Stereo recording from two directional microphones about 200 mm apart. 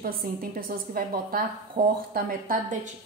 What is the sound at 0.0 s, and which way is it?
A woman's voice, 45° right (ahead or behind).